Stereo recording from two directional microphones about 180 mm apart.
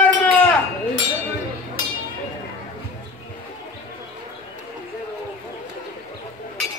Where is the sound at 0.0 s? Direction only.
10° left (ahead or behind).